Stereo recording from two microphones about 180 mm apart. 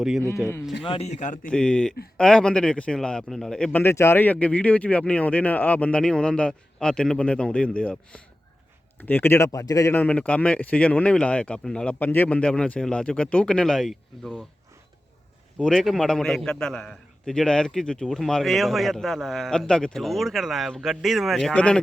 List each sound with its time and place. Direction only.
0.9 s speech: 35° left (ahead or behind)
1.5 s a man's voice: 5° left (ahead or behind)
15.5 s a man's voice: 5° left (ahead or behind)